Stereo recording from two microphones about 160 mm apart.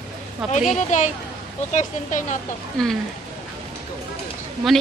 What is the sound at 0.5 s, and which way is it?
A woman's voice, 50° left (ahead or behind).